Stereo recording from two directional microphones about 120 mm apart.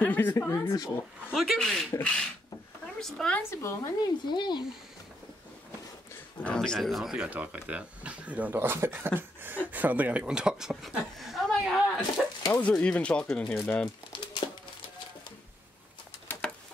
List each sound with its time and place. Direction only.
0.0 s speech: 15° left (ahead or behind)
1.3 s speech: centre (ahead or behind)
1.9 s speech: 15° left (ahead or behind)
3.4 s speech: 25° left (ahead or behind)
4.3 s speech: 40° left (ahead or behind)
6.4 s speech: 5° left (ahead or behind)
12.2 s bird: 5° right (ahead or behind)
12.5 s speech: 10° left (ahead or behind)
16.3 s a sound: 10° left (ahead or behind)